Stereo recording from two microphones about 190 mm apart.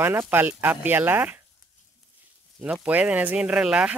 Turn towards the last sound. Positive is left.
turn(degrees=-5)  # may be behind; listen again after turning